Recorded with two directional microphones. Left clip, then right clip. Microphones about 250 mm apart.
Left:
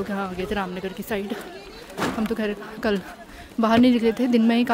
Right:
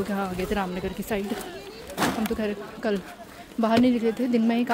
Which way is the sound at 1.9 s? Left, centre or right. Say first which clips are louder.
Even; right.